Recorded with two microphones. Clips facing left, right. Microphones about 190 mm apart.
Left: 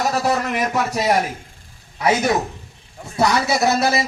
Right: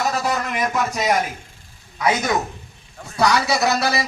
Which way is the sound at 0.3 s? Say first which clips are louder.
Left 3 dB; 30° left (ahead or behind).